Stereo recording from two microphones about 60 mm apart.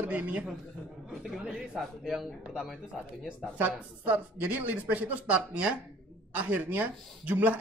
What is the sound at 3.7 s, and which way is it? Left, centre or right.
Speech, right.